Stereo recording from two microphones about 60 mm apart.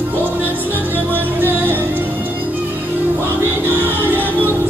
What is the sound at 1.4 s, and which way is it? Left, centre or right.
Music, right.